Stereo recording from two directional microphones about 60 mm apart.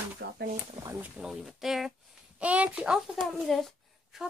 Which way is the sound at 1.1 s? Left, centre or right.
Centre.